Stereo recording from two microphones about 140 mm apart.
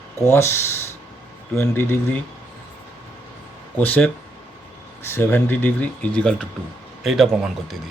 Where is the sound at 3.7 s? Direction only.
10° left (ahead or behind).